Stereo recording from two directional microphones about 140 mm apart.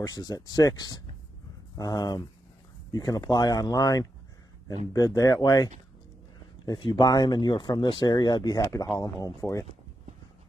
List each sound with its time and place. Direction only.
0.0 s speech: 25° left (ahead or behind)